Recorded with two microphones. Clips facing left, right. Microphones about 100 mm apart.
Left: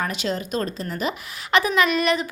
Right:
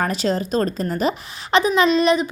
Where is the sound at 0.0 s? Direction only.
35° right (ahead or behind).